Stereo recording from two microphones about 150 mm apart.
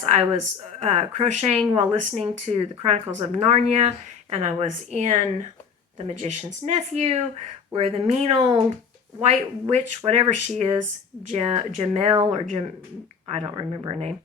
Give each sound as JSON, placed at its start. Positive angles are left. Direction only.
{"t": 0.8, "sound": "speech", "side_deg": -45}
{"t": 8.4, "sound": "speech", "side_deg": -30}
{"t": 9.2, "sound": "speech", "side_deg": -50}